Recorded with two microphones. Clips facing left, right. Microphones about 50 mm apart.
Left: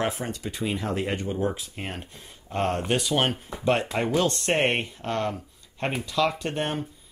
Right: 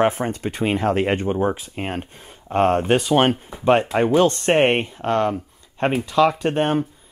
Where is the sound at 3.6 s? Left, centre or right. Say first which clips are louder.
Right 7 dB; right.